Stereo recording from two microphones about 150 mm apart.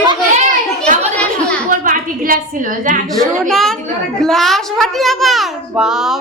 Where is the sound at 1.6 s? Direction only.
70° right (ahead or behind).